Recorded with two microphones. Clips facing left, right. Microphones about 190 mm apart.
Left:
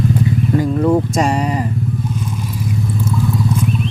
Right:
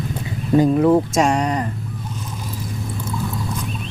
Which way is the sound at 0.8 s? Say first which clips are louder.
Even; centre (ahead or behind).